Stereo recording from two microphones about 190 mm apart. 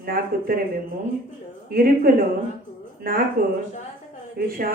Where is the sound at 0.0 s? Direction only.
50° right (ahead or behind).